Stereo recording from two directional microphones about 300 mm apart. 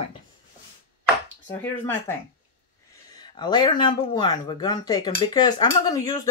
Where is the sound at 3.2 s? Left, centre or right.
Centre.